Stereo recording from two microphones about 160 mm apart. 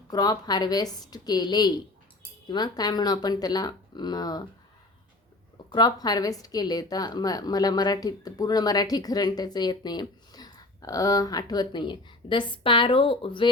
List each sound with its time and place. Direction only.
0.1 s a woman's voice: 25° left (ahead or behind)
5.7 s a woman's voice: 25° left (ahead or behind)